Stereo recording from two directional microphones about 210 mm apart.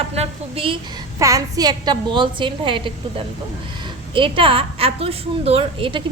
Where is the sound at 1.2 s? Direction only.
15° right (ahead or behind).